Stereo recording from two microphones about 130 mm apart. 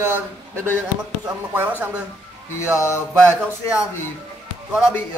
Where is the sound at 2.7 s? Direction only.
25° left (ahead or behind).